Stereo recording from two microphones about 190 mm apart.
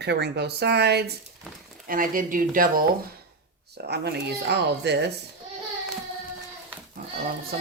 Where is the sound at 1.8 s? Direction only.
45° right (ahead or behind).